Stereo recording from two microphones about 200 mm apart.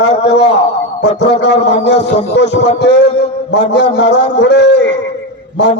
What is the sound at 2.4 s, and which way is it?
A man's voice, 55° left (ahead or behind).